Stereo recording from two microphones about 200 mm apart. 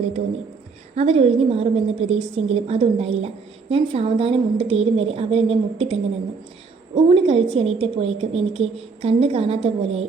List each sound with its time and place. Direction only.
0.9 s a woman's voice: 30° right (ahead or behind)